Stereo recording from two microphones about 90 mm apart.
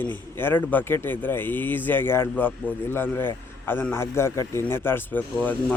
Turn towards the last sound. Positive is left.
turn(degrees=20)  # may be behind; listen again after turning